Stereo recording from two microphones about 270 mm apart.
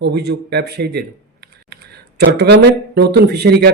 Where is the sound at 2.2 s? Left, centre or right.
Right.